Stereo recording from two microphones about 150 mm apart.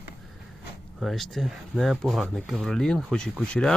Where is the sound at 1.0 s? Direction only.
Centre (ahead or behind).